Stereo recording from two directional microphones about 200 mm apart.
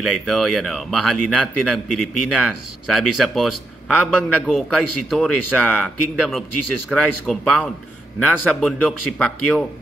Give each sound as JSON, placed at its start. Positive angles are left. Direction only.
{"t": 0.0, "sound": "a man's voice", "side_deg": 0}